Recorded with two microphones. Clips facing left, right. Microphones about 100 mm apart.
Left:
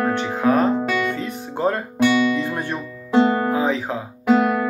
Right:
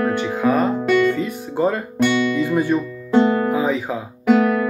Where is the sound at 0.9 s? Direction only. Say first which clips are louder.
Right 6 dB; centre (ahead or behind).